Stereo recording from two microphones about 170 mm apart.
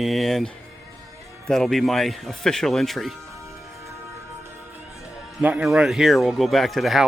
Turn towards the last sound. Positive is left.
turn(degrees=0)  # may be behind; listen again after turning